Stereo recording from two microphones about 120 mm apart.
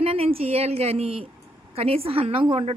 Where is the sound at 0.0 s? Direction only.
50° right (ahead or behind).